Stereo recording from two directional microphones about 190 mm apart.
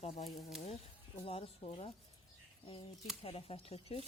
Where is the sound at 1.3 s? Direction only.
30° left (ahead or behind).